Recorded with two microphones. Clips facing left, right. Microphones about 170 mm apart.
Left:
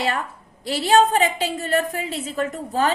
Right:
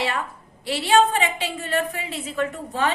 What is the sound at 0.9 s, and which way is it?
A woman's voice, 40° left (ahead or behind).